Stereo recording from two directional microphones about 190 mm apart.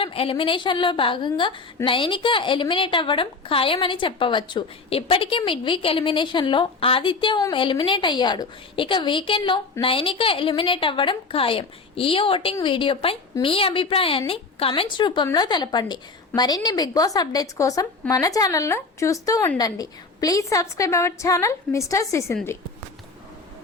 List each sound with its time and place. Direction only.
0.0 s a woman's voice: 30° left (ahead or behind)